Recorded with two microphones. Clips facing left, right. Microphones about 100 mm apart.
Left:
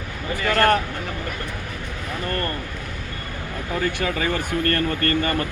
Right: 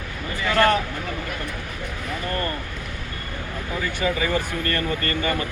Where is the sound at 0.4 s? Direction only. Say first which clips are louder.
Left 1 dB; 50° left (ahead or behind).